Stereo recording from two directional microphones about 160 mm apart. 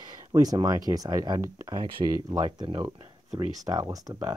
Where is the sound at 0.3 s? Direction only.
25° right (ahead or behind).